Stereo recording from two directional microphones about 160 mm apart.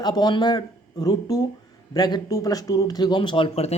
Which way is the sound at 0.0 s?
25° left (ahead or behind).